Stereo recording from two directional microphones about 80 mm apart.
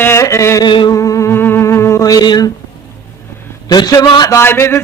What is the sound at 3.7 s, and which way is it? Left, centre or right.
Speech, left.